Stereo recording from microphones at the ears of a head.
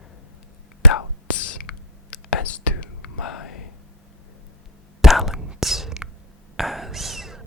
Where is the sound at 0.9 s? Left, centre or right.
Left.